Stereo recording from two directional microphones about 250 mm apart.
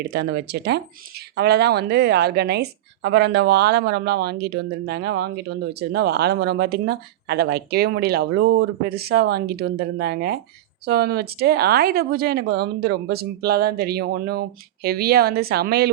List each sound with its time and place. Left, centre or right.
0.1 s speech: right